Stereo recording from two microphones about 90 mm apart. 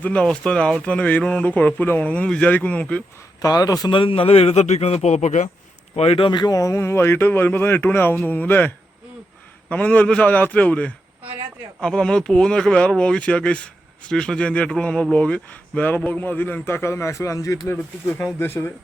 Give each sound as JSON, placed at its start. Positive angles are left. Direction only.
{"t": 0.0, "sound": "speech", "side_deg": 15}
{"t": 3.4, "sound": "speech", "side_deg": 40}
{"t": 3.8, "sound": "speech", "side_deg": 75}
{"t": 6.1, "sound": "speech", "side_deg": 70}
{"t": 6.4, "sound": "a man's voice", "side_deg": 40}
{"t": 18.0, "sound": "a man's voice", "side_deg": 25}